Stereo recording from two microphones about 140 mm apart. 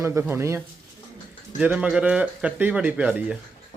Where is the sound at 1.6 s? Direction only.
10° right (ahead or behind).